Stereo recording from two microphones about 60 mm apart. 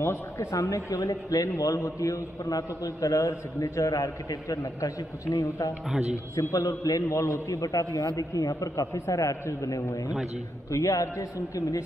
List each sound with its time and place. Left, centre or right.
0.0 s a man's voice: left
8.0 s a man's voice: left
8.9 s a man's voice: left